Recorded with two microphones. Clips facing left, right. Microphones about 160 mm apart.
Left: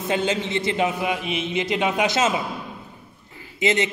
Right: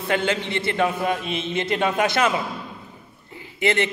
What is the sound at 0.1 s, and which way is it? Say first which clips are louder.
A man's voice: even; 20° left (ahead or behind).